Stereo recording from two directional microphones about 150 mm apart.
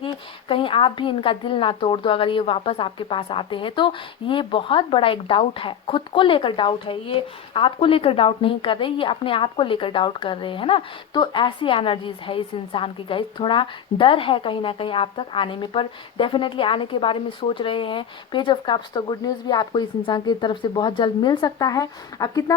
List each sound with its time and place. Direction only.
0.0 s a woman's voice: 35° left (ahead or behind)